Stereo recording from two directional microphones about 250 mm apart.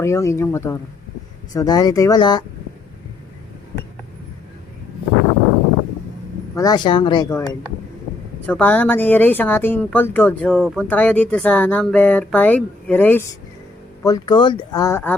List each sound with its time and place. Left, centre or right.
0.0 s speech: centre
6.6 s speech: centre
8.4 s speech: centre